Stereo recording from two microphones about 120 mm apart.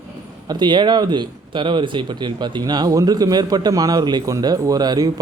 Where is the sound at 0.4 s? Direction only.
40° right (ahead or behind).